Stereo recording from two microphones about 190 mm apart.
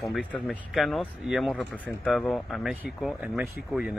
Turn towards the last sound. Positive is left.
turn(degrees=0)  # may be behind; listen again after turning